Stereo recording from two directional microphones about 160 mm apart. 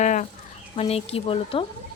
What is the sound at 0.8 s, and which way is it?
Speech, 40° left (ahead or behind).